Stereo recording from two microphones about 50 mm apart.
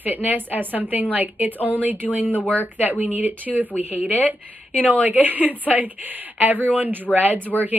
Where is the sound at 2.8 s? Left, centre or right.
Right.